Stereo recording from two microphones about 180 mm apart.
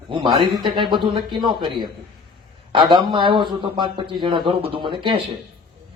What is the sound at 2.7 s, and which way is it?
Speech, 25° right (ahead or behind).